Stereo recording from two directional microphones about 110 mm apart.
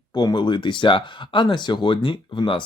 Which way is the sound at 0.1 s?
35° left (ahead or behind).